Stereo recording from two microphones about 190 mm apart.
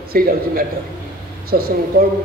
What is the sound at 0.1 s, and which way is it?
Speech, 50° right (ahead or behind).